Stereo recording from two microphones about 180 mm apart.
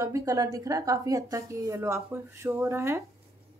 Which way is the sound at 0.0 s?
20° right (ahead or behind).